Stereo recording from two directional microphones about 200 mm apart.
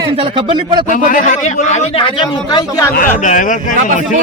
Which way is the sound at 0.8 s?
40° left (ahead or behind).